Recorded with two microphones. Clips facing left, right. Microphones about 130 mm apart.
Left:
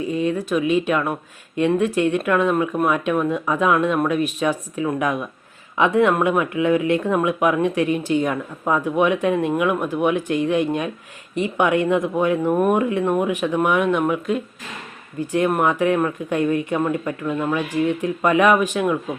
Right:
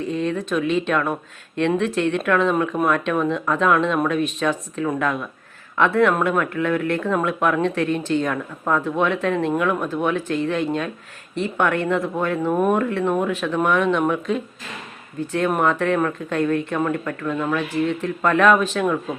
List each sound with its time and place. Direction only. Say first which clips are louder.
0.0 s speech: left 2 dB; 5° left (ahead or behind)